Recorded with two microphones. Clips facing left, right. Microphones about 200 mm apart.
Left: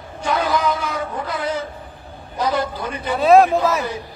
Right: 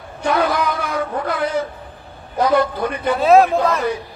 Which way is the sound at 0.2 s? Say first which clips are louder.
Right 2 dB; 60° right (ahead or behind).